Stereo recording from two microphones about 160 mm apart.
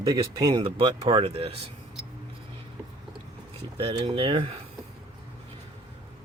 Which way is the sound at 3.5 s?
35° right (ahead or behind).